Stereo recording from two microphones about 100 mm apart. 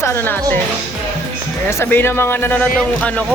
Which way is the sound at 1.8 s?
20° left (ahead or behind).